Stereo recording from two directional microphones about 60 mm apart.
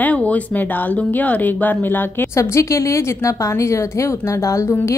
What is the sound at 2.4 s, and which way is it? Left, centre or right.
A woman's voice, left.